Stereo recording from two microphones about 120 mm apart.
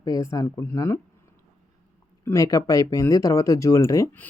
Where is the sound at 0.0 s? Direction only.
30° left (ahead or behind).